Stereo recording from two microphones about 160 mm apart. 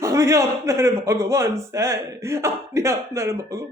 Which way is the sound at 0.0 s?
20° right (ahead or behind).